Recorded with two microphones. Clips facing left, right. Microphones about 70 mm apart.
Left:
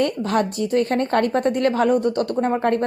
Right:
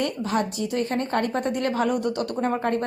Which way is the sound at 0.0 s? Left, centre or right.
Left.